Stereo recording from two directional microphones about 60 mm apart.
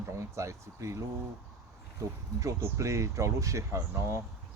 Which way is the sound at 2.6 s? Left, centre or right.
Right.